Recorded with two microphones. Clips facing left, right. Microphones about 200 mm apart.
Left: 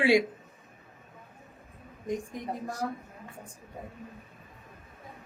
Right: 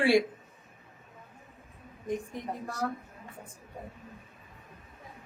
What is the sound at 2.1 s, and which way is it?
Speech, 15° left (ahead or behind).